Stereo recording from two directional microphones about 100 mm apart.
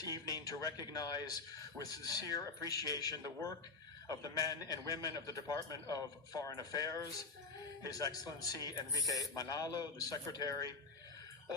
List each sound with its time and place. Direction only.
0.0 s a man's voice: 40° left (ahead or behind)